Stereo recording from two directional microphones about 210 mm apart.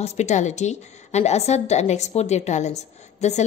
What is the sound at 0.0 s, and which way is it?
A woman's voice, 30° left (ahead or behind).